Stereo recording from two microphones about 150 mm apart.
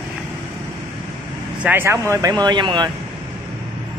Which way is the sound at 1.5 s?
10° right (ahead or behind).